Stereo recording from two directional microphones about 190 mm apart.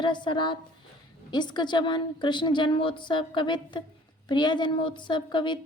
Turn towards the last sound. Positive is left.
turn(degrees=25)  # may be behind; listen again after turning